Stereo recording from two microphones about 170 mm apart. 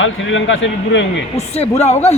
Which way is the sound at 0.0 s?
90° left.